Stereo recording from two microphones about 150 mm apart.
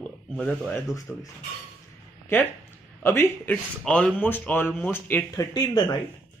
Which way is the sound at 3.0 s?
15° left (ahead or behind).